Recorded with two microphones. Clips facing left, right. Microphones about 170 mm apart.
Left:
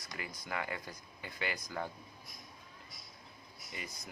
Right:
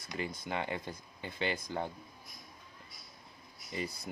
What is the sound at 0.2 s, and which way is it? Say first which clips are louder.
Speech: right 4 dB; 25° right (ahead or behind).